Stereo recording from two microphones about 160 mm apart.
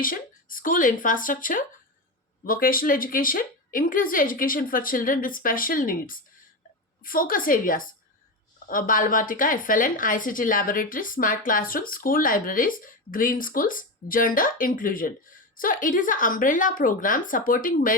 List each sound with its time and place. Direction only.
0.0 s speech: 60° left (ahead or behind)